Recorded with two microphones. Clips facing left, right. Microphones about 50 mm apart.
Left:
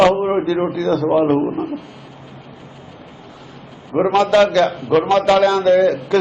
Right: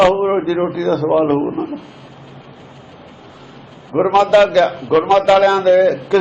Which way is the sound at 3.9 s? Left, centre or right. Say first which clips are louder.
Right 2 dB; centre.